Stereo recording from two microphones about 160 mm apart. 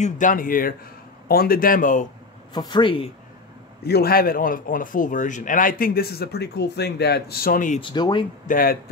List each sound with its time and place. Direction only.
0.0 s speech: 55° left (ahead or behind)
2.5 s speech: 25° left (ahead or behind)
3.8 s speech: 75° left (ahead or behind); by 7.8 s 55° left (ahead or behind)
7.8 s speech: 30° left (ahead or behind)
8.5 s speech: 65° left (ahead or behind)